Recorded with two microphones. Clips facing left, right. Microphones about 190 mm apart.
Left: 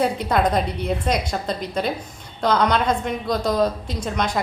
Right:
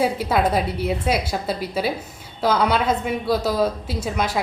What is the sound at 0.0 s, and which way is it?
A woman's voice, 5° right (ahead or behind).